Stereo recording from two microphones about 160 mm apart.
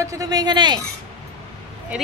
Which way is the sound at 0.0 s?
20° right (ahead or behind).